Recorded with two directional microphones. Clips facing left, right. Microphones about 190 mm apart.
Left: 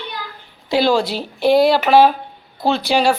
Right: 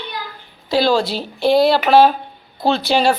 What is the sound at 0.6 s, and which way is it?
Speech, 15° left (ahead or behind).